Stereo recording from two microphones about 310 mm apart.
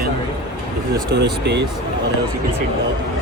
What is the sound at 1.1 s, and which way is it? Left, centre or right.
Speech, right.